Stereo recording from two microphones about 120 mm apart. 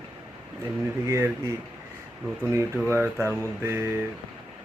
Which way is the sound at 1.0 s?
25° right (ahead or behind).